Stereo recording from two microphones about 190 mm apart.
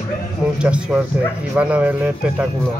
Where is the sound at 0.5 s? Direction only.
5° right (ahead or behind).